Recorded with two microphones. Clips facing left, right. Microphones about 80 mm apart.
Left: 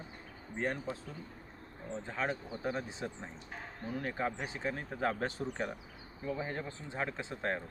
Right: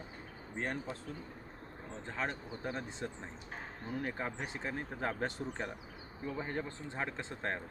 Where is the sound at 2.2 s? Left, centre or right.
Centre.